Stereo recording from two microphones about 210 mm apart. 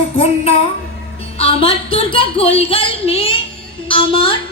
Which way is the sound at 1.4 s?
25° left (ahead or behind).